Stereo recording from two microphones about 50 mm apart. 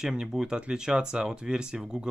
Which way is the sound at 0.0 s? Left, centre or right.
Centre.